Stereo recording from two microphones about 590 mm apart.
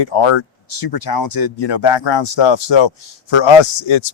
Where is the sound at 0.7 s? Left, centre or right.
Left.